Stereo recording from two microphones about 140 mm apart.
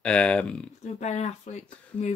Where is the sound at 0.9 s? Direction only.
55° left (ahead or behind).